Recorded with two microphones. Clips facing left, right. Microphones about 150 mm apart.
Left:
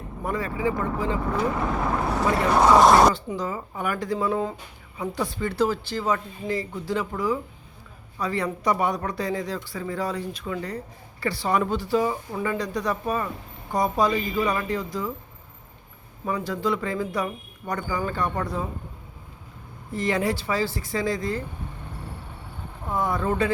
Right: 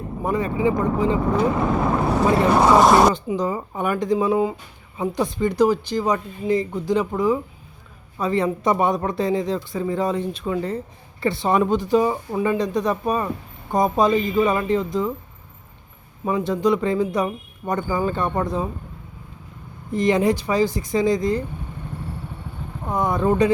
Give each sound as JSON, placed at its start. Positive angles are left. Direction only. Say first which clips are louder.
{"t": 0.2, "sound": "speech", "louder": "right 5 dB", "side_deg": -20}
{"t": 2.5, "sound": "speech", "louder": "even", "side_deg": 0}
{"t": 3.2, "sound": "speech", "louder": "right 6 dB", "side_deg": -20}
{"t": 16.2, "sound": "speech", "louder": "right 6 dB", "side_deg": -20}
{"t": 19.9, "sound": "speech", "louder": "right 6 dB", "side_deg": -20}
{"t": 22.9, "sound": "speech", "louder": "right 4 dB", "side_deg": -20}